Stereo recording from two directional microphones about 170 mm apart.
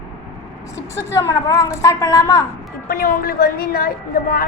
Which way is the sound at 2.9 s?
60° left (ahead or behind).